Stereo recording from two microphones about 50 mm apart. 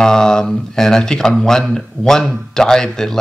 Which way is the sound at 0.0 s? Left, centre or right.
Centre.